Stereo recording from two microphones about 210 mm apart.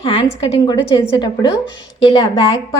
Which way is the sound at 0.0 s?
25° left (ahead or behind).